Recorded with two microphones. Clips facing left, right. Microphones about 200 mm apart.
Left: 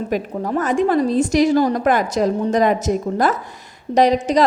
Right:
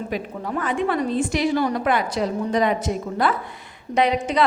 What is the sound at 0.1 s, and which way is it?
A woman's voice, 40° left (ahead or behind).